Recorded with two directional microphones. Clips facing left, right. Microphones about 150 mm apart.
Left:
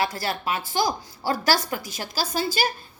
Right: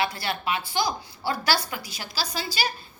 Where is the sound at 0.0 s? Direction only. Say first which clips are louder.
Left 1 dB; 40° left (ahead or behind).